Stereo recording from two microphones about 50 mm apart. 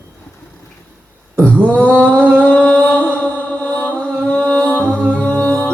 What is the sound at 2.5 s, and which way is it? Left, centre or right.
Music, centre.